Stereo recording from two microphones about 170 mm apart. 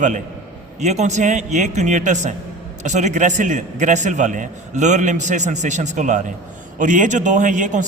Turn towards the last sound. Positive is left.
turn(degrees=-50)  # may be behind; listen again after turning